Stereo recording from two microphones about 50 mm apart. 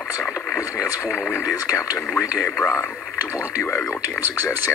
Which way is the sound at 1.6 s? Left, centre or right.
Left.